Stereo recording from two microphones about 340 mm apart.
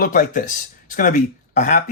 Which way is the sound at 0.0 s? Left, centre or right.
Left.